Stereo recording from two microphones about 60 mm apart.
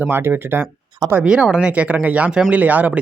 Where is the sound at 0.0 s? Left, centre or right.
Right.